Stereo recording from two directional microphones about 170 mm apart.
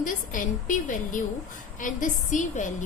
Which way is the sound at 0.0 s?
50° left (ahead or behind).